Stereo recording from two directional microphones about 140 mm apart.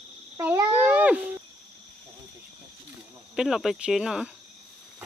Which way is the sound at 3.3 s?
5° right (ahead or behind).